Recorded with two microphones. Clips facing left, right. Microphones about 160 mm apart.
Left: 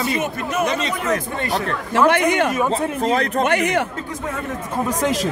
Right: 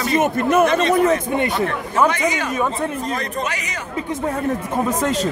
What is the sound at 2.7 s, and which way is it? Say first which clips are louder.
Speech: left 4 dB; 90° left.